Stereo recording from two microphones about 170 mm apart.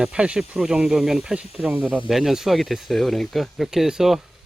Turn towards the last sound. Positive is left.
turn(degrees=0)  # may be behind; listen again after turning